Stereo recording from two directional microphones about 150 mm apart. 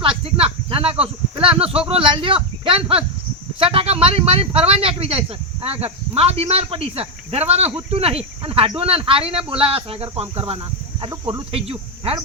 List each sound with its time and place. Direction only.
0.0 s speech: 35° right (ahead or behind)
3.6 s a sound: 40° right (ahead or behind)
5.6 s speech: 40° right (ahead or behind)